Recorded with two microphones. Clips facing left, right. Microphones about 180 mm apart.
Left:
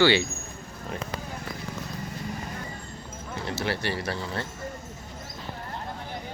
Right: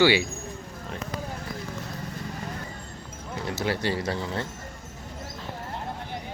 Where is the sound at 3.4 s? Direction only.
15° right (ahead or behind).